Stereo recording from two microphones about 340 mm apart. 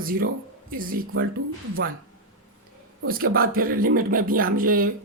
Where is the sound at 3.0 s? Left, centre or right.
Right.